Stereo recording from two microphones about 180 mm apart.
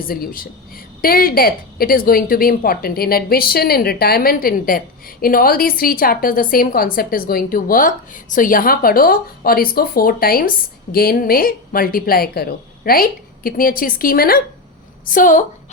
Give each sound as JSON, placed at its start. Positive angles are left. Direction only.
{"t": 0.0, "sound": "a woman's voice", "side_deg": 55}